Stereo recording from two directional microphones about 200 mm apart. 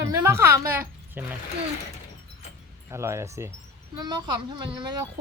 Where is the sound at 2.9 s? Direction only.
15° right (ahead or behind).